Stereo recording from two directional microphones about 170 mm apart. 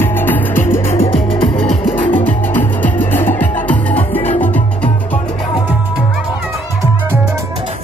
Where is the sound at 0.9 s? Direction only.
35° left (ahead or behind).